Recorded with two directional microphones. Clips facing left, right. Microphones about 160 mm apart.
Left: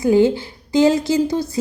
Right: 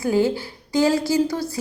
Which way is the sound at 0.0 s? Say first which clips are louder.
Left 5 dB; 20° left (ahead or behind).